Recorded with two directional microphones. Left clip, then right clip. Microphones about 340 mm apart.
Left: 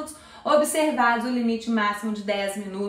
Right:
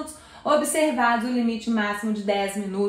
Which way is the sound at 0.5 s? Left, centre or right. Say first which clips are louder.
Left 1 dB; centre.